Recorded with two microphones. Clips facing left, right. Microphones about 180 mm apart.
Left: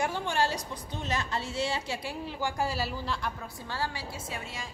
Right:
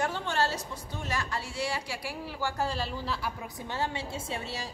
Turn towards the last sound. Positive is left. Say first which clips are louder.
# right 3 dB
turn(degrees=-30)  # may be behind; listen again after turning